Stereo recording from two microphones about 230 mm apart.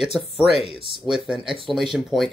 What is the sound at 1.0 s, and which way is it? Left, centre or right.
Speech, centre.